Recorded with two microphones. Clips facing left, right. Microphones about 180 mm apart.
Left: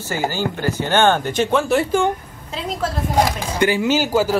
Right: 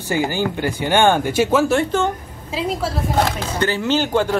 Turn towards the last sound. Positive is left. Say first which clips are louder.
# left 1 dB
turn(degrees=5)  # may be behind; listen again after turning